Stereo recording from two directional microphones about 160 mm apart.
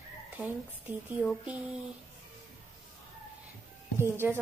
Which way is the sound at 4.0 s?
15° right (ahead or behind).